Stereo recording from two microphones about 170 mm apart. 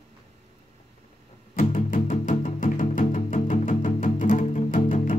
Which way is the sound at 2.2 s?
50° left (ahead or behind).